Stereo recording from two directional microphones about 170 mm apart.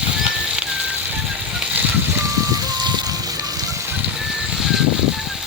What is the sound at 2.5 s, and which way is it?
Music, 25° right (ahead or behind).